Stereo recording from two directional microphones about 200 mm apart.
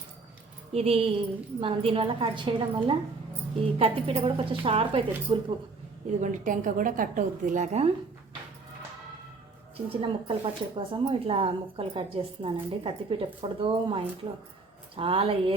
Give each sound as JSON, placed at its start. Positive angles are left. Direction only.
{"t": 0.7, "sound": "speech", "side_deg": -30}
{"t": 6.1, "sound": "a woman's voice", "side_deg": -40}
{"t": 9.7, "sound": "speech", "side_deg": -25}